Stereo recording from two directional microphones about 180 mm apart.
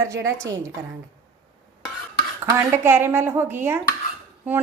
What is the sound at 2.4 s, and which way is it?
Speech, 15° right (ahead or behind).